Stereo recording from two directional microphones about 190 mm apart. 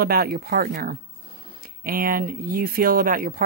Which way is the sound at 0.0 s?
55° right (ahead or behind).